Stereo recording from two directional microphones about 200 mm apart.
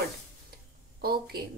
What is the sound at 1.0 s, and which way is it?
Speech, 50° right (ahead or behind).